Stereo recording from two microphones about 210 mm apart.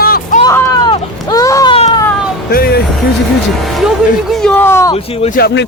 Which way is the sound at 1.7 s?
25° left (ahead or behind).